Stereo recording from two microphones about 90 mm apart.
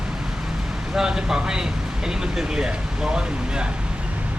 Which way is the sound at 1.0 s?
5° right (ahead or behind).